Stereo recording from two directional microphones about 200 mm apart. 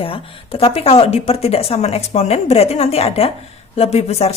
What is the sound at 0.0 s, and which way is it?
A woman's voice, 25° left (ahead or behind).